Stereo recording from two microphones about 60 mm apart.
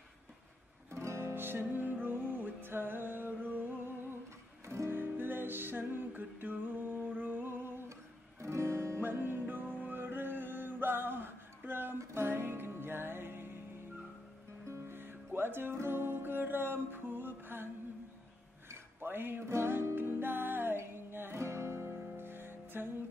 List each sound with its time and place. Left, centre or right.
0.9 s music: right
1.3 s music: right
4.6 s music: right
8.4 s music: right
9.2 s music: right
12.0 s music: right
12.3 s music: right
14.7 s music: right
18.7 s music: right
21.4 s music: right